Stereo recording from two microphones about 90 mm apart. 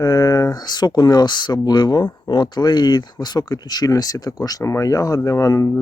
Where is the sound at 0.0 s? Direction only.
45° left (ahead or behind).